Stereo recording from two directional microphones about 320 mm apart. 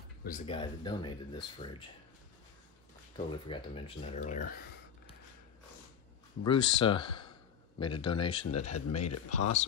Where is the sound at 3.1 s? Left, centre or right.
Centre.